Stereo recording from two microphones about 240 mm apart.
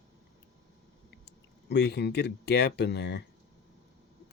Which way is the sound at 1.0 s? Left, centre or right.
Left.